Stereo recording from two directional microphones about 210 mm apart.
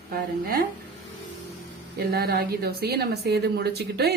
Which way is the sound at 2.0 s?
50° right (ahead or behind).